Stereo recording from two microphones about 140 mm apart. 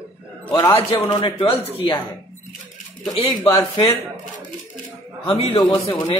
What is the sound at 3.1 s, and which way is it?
Speech, 30° left (ahead or behind).